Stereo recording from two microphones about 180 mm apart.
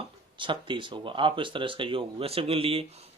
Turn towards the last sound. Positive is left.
turn(degrees=-35)  # may be behind; listen again after turning